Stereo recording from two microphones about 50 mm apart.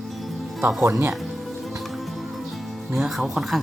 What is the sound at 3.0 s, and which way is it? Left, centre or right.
Speech, centre.